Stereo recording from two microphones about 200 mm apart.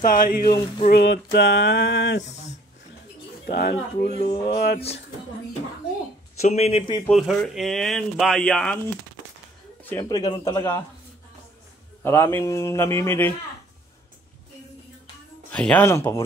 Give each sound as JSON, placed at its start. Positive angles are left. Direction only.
{"t": 0.0, "sound": "speech", "side_deg": 45}
{"t": 0.8, "sound": "a sound", "side_deg": 55}
{"t": 2.2, "sound": "speech", "side_deg": 35}
{"t": 3.4, "sound": "a sound", "side_deg": 55}
{"t": 4.5, "sound": "speech", "side_deg": 55}
{"t": 6.4, "sound": "speech", "side_deg": 35}
{"t": 7.1, "sound": "speech", "side_deg": 0}
{"t": 9.8, "sound": "speech", "side_deg": 20}
{"t": 12.0, "sound": "speech", "side_deg": 10}
{"t": 15.5, "sound": "speech", "side_deg": 5}